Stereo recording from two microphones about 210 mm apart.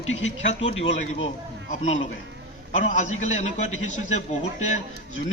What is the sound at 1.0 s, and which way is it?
Speech, 35° left (ahead or behind).